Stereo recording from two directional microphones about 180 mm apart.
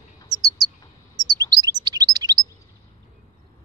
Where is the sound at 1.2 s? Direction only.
20° right (ahead or behind).